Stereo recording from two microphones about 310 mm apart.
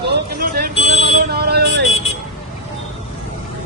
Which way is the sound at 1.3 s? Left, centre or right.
Right.